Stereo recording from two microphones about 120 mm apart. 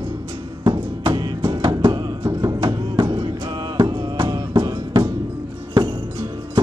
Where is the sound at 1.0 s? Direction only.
40° right (ahead or behind).